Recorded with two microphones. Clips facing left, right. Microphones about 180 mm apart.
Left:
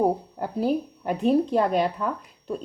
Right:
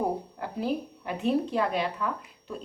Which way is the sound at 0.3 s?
40° left (ahead or behind).